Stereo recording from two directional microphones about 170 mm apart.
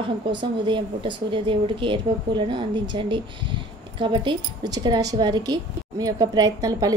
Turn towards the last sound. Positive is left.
turn(degrees=-20)  # may be behind; listen again after turning